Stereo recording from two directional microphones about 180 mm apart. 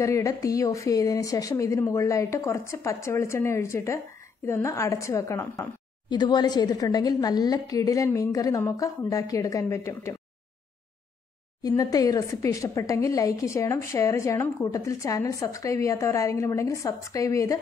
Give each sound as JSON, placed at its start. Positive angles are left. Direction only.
{"t": 0.0, "sound": "a woman's voice", "side_deg": 15}
{"t": 11.6, "sound": "a woman's voice", "side_deg": 20}